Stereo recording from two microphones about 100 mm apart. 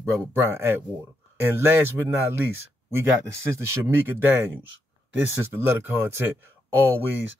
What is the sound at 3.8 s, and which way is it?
Speech, 25° right (ahead or behind).